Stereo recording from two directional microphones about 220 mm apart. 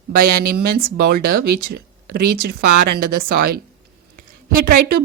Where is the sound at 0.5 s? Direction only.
40° right (ahead or behind).